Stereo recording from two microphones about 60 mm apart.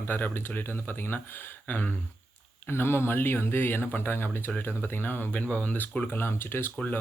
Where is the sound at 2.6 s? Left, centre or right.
Left.